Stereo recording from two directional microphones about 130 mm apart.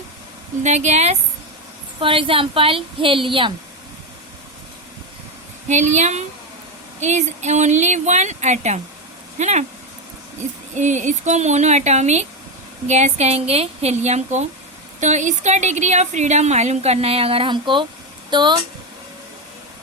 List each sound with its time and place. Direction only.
0.6 s a woman's voice: 65° right (ahead or behind)
2.0 s a woman's voice: 45° right (ahead or behind)
5.6 s a woman's voice: 65° right (ahead or behind)
10.8 s a woman's voice: 70° right (ahead or behind); by 18.6 s 35° right (ahead or behind)